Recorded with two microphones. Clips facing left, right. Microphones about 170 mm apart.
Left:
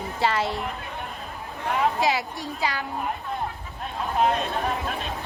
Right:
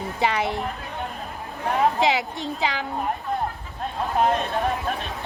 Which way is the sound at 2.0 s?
20° right (ahead or behind).